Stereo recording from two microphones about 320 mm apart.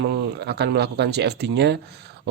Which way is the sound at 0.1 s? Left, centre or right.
Right.